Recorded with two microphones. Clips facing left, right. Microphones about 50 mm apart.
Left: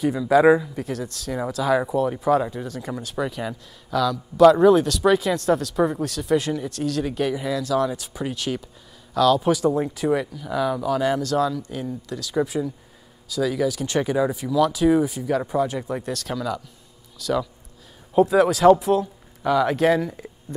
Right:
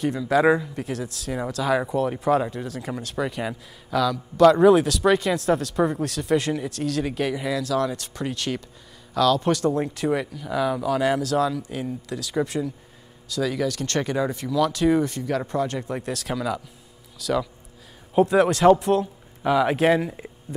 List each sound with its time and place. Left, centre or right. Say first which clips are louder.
0.0 s a man's voice: left 3 dB; centre
19.4 s speech: even; centre